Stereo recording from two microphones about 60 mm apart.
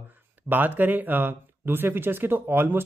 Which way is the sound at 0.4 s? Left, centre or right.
Right.